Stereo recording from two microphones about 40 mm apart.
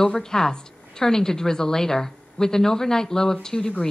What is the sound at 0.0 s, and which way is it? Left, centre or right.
A woman's voice, centre.